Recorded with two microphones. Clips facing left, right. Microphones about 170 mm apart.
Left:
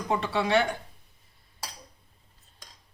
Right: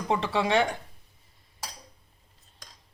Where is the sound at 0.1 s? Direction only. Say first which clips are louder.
Even; 25° right (ahead or behind).